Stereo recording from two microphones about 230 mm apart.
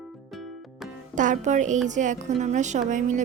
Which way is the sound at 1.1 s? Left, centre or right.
Right.